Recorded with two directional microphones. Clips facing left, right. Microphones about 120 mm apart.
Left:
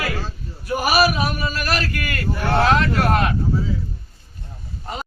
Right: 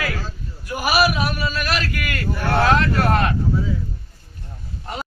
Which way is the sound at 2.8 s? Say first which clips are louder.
Even; 15° left (ahead or behind).